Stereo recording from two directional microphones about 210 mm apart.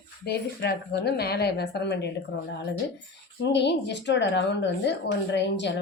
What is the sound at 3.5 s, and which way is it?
A woman's voice, 55° left (ahead or behind).